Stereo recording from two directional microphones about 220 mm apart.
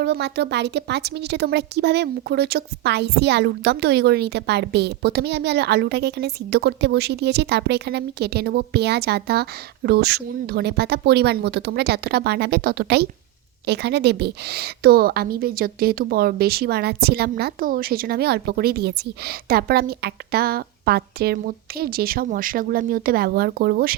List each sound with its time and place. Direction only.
0.0 s a woman's voice: 50° right (ahead or behind)